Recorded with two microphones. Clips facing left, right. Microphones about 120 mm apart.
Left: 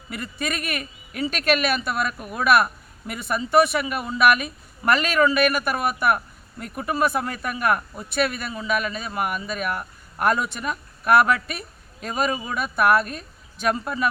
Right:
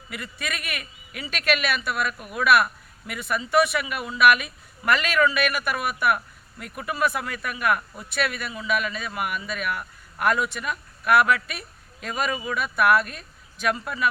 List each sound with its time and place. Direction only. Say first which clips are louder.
0.1 s speech: left 4 dB; 40° left (ahead or behind)